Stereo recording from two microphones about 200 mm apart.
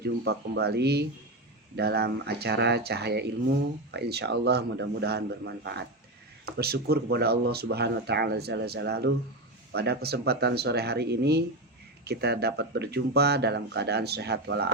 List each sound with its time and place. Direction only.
0.0 s speech: 55° right (ahead or behind)